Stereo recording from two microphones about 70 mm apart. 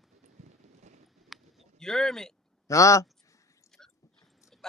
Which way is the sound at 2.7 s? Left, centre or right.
Left.